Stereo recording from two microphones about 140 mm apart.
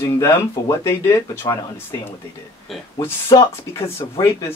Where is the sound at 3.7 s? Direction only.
20° left (ahead or behind).